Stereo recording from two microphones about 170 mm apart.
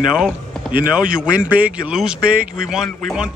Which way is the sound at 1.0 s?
5° right (ahead or behind).